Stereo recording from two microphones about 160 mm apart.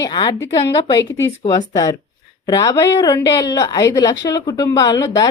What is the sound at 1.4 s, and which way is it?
A woman's voice, 25° left (ahead or behind).